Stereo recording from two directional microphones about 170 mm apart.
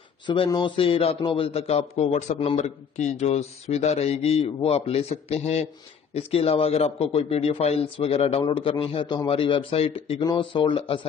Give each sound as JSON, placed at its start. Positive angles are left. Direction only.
{"t": 0.3, "sound": "a man's voice", "side_deg": 25}